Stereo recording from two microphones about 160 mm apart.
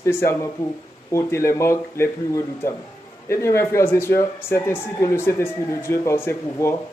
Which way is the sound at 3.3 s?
15° left (ahead or behind).